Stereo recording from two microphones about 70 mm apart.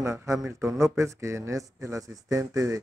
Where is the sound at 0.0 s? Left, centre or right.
Right.